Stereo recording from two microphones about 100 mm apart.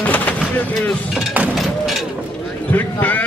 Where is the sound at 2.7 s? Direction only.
15° left (ahead or behind).